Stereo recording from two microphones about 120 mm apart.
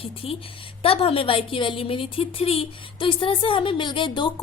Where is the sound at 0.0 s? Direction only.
50° left (ahead or behind).